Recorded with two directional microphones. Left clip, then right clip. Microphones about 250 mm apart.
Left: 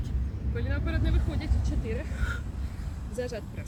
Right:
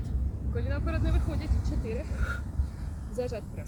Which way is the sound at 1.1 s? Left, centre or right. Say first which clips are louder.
Even; right.